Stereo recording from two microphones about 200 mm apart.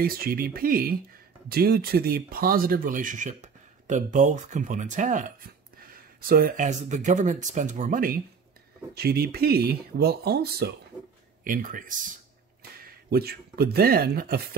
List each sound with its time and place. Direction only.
0.0 s speech: 45° right (ahead or behind)
11.4 s speech: 40° right (ahead or behind)
13.1 s speech: 50° right (ahead or behind)